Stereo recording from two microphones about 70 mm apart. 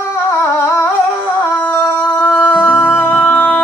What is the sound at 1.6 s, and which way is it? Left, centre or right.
Music, left.